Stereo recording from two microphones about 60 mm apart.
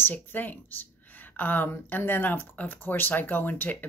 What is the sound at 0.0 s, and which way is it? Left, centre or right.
Speech, left.